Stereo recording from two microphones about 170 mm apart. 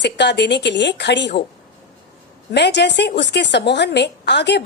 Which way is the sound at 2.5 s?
90° left.